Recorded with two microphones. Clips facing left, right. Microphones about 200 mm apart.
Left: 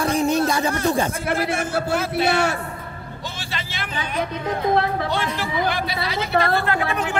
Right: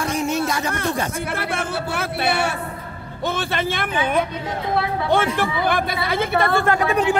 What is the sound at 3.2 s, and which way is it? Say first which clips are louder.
A woman's voice: right 11 dB; 55° right (ahead or behind).